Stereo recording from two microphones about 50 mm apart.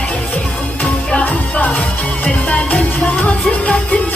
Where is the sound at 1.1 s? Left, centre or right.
Left.